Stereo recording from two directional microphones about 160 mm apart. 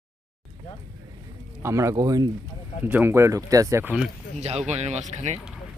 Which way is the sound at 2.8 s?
10° right (ahead or behind).